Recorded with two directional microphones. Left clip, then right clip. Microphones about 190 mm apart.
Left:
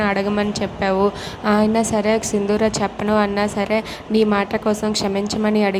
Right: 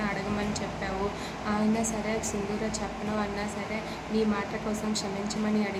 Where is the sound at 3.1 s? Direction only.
55° left (ahead or behind).